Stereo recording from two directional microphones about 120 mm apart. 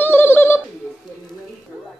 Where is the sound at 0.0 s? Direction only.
15° left (ahead or behind).